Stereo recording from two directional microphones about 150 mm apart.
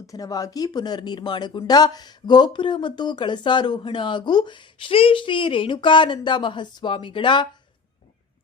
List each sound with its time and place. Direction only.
0.1 s speech: 25° left (ahead or behind)